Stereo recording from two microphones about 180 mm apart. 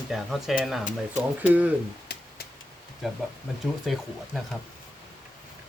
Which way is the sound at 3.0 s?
Centre (ahead or behind).